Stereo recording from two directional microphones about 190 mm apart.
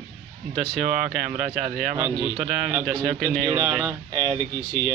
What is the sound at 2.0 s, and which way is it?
Speech, 15° right (ahead or behind).